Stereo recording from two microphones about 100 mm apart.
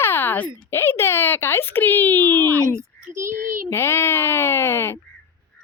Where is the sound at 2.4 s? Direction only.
30° right (ahead or behind).